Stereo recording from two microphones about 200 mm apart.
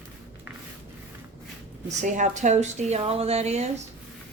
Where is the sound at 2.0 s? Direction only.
40° right (ahead or behind).